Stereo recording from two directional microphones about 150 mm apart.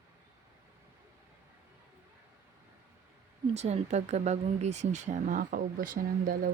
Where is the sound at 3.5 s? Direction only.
50° right (ahead or behind).